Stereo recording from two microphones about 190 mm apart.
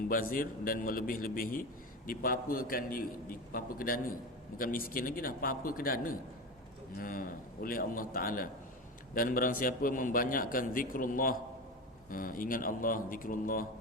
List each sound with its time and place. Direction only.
0.1 s a man's voice: 50° left (ahead or behind)